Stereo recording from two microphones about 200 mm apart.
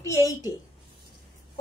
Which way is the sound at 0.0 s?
15° left (ahead or behind).